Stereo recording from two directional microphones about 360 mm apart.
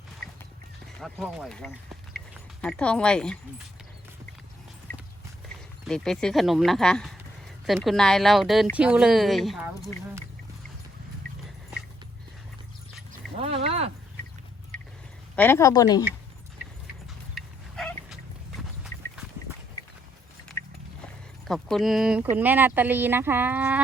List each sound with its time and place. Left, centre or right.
0.9 s speech: centre
4.9 s horse: centre
5.8 s speech: centre
13.3 s a sound: centre
14.7 s a sound: centre
15.4 s speech: centre
17.3 s dog: centre
20.6 s a sound: centre
22.4 s speech: centre